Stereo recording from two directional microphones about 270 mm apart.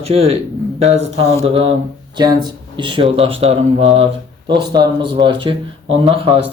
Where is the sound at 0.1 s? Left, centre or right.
Right.